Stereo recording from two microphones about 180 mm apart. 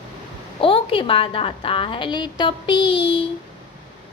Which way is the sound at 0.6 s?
30° left (ahead or behind).